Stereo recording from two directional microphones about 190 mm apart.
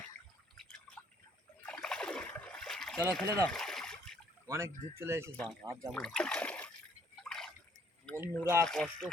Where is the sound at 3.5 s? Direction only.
Centre (ahead or behind).